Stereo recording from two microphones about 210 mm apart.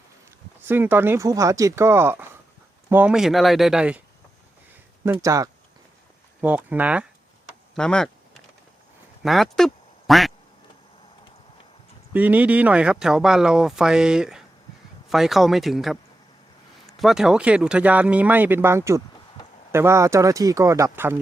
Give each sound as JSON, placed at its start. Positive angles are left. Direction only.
{"t": 0.7, "sound": "speech", "side_deg": -10}
{"t": 5.2, "sound": "speech", "side_deg": -15}
{"t": 9.2, "sound": "quack", "side_deg": 0}
{"t": 12.1, "sound": "speech", "side_deg": -10}